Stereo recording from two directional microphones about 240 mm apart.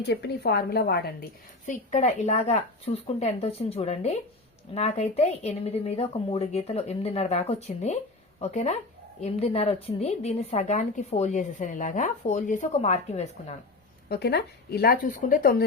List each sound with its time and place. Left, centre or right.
0.0 s speech: left
1.6 s speech: left
14.1 s speech: left